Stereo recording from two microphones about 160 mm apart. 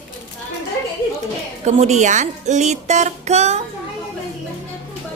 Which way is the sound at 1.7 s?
45° right (ahead or behind).